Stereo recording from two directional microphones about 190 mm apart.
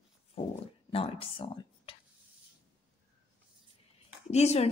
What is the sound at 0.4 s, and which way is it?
Speech, 35° left (ahead or behind).